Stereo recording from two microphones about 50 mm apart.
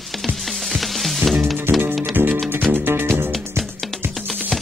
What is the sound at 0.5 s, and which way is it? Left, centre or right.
Music, centre.